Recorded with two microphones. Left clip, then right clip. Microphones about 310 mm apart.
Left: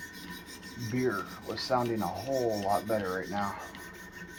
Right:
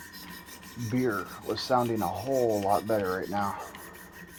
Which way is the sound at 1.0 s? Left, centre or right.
Right.